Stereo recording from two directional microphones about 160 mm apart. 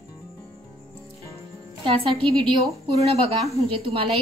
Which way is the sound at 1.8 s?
30° right (ahead or behind).